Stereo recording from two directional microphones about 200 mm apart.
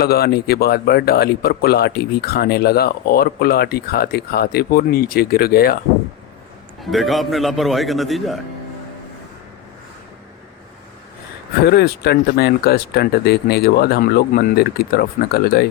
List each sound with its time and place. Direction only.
0.0 s speech: 50° left (ahead or behind)
6.8 s a man's voice: centre (ahead or behind)
11.6 s speech: 55° left (ahead or behind)